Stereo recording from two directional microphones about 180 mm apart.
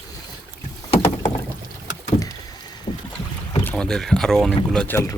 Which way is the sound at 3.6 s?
10° left (ahead or behind).